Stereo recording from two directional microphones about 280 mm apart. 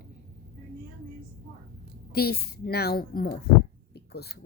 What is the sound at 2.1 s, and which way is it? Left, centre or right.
A woman's voice, left.